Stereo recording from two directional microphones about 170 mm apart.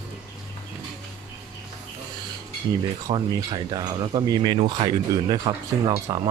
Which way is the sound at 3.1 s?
25° right (ahead or behind).